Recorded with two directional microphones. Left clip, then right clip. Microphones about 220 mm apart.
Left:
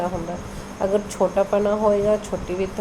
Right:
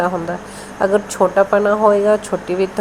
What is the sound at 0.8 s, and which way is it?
A woman's voice, 20° right (ahead or behind).